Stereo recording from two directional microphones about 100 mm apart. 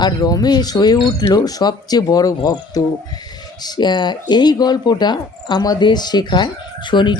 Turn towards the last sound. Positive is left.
turn(degrees=50)  # may be behind; listen again after turning